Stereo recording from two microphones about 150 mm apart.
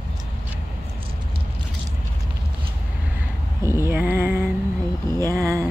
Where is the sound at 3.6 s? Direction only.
20° right (ahead or behind).